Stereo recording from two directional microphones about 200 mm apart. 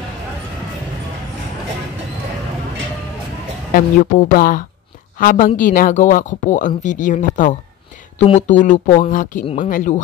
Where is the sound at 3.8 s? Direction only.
45° left (ahead or behind).